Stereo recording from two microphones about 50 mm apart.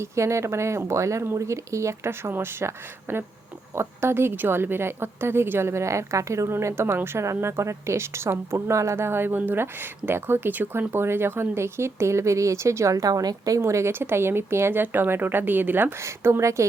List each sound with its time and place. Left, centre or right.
0.0 s a woman's voice: right
2.0 s a woman's voice: right
7.4 s a woman's voice: right
14.0 s speech: right
14.8 s speech: right
16.0 s a woman's voice: right